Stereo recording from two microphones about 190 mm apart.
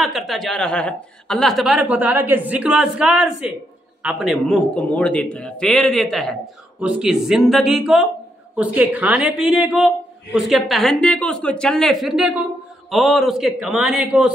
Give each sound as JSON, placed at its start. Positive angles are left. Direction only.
{"t": 0.0, "sound": "a woman's voice", "side_deg": 0}